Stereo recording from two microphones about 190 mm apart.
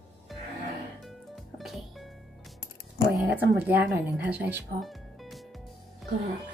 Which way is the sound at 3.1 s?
5° right (ahead or behind).